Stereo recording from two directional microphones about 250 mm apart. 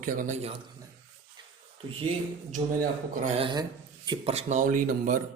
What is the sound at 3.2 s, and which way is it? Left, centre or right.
Speech, right.